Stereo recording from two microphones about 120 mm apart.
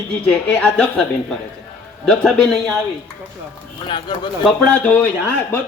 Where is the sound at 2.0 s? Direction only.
5° left (ahead or behind).